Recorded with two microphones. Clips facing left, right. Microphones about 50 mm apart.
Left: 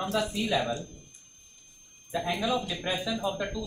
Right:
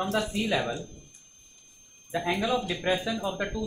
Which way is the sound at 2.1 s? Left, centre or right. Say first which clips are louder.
Right 2 dB; right.